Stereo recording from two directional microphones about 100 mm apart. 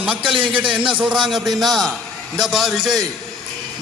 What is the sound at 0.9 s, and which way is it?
Speech, 15° right (ahead or behind).